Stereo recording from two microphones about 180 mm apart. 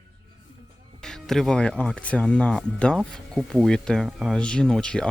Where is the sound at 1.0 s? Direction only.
Centre (ahead or behind).